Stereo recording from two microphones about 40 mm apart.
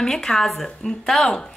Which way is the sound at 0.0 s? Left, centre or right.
Centre.